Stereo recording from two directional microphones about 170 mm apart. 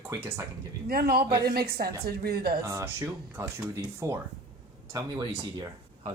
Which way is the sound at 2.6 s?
15° right (ahead or behind).